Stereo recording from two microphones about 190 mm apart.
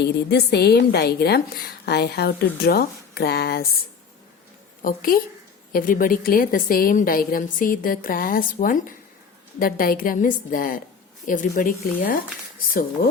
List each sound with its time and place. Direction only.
0.0 s a woman's voice: 60° left (ahead or behind)